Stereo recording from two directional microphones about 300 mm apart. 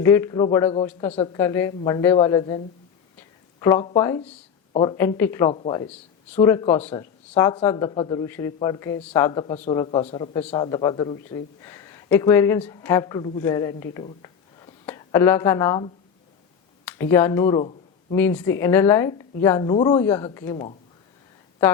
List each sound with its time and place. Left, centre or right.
0.0 s speech: centre
5.9 s speech: centre
14.0 s a sound: centre
16.8 s speech: centre